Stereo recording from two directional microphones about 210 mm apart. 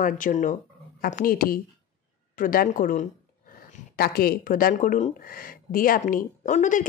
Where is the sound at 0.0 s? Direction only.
40° left (ahead or behind).